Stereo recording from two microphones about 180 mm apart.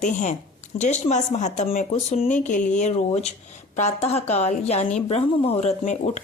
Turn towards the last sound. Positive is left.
turn(degrees=40)  # may be behind; listen again after turning